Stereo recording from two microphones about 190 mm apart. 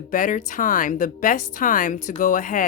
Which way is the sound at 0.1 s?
45° left (ahead or behind).